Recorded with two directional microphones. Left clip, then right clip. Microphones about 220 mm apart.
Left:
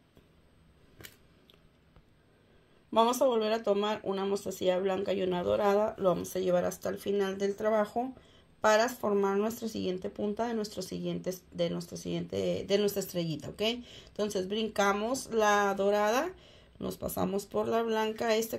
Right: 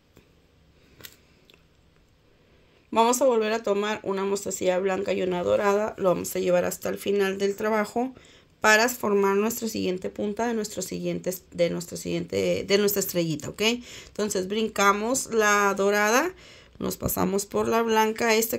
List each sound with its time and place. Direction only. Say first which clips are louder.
2.9 s speech: right 5 dB; 20° right (ahead or behind)